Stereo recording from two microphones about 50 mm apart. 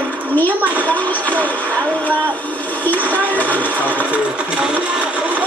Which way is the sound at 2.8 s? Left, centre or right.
Left.